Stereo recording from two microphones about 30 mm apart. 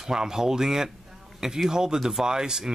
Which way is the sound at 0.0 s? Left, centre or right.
Centre.